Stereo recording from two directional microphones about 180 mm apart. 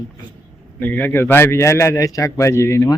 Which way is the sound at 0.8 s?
10° left (ahead or behind).